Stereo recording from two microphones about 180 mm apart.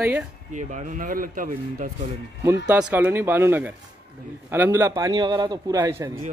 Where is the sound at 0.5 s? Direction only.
45° right (ahead or behind).